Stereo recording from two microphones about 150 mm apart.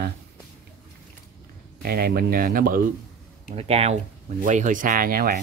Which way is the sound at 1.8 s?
90° right.